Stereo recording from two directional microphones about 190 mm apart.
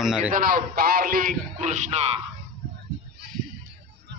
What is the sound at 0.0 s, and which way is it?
Speech, 5° right (ahead or behind).